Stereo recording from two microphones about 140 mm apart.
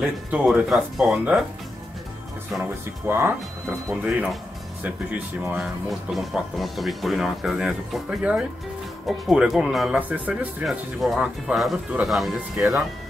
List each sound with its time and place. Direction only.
0.0 s speech: 5° right (ahead or behind)
2.6 s speech: 15° right (ahead or behind)
5.6 s speech: centre (ahead or behind)